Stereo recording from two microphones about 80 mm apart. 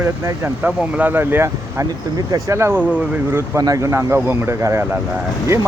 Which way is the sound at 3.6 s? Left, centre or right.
Right.